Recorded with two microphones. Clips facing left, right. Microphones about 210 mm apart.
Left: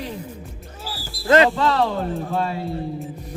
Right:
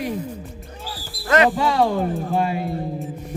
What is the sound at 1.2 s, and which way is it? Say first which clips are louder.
Speech: left 2 dB; 25° left (ahead or behind).